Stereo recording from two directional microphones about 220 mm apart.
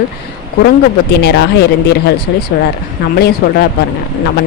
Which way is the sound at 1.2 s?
50° left (ahead or behind).